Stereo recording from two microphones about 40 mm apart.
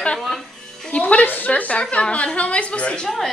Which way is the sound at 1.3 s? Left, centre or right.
Left.